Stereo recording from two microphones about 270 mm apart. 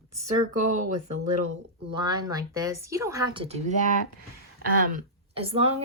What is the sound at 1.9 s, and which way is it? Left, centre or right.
A woman's voice, centre.